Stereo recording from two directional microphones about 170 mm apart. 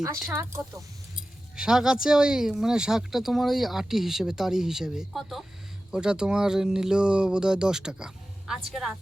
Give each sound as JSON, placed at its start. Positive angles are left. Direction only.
{"t": 0.3, "sound": "speech", "side_deg": -15}
{"t": 1.5, "sound": "speech", "side_deg": -5}